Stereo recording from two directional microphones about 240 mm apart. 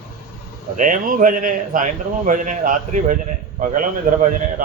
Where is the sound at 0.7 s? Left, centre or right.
Right.